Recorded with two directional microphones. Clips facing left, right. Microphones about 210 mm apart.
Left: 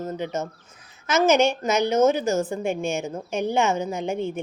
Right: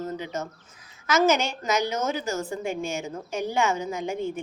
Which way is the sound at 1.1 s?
20° left (ahead or behind).